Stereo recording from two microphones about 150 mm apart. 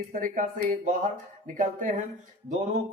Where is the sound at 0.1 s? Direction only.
65° right (ahead or behind).